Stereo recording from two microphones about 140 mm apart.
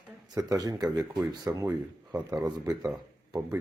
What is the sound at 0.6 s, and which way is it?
Speech, 25° right (ahead or behind).